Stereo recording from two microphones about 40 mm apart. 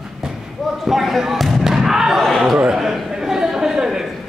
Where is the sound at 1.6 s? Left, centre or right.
Centre.